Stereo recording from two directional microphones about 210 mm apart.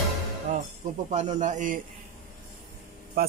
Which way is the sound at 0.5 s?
35° right (ahead or behind).